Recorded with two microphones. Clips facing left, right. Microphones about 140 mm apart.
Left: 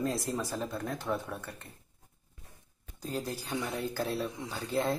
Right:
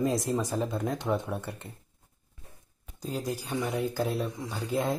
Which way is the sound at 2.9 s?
10° right (ahead or behind).